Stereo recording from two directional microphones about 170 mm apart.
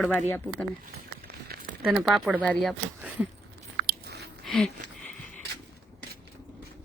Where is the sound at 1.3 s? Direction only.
60° right (ahead or behind).